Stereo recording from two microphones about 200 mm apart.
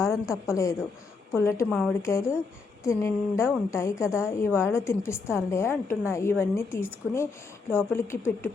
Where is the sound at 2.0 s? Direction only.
15° left (ahead or behind).